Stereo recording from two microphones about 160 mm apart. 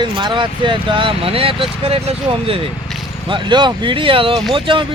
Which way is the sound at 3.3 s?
30° right (ahead or behind).